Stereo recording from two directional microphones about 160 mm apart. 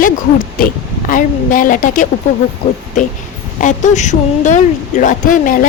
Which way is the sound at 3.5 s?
50° left (ahead or behind).